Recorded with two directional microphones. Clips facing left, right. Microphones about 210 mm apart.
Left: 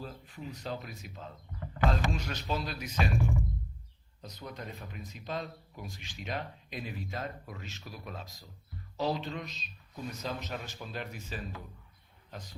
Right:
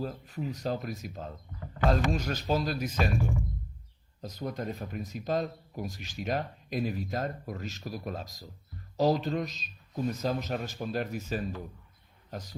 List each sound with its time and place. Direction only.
0.0 s speech: 40° right (ahead or behind)
4.2 s speech: 45° right (ahead or behind)